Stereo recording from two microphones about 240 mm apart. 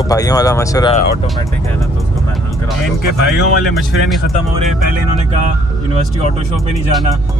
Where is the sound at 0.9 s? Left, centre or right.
Left.